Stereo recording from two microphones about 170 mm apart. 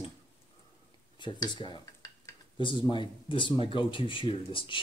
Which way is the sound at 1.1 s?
25° left (ahead or behind).